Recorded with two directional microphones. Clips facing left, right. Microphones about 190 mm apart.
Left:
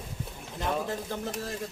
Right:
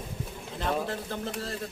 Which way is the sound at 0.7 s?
10° left (ahead or behind).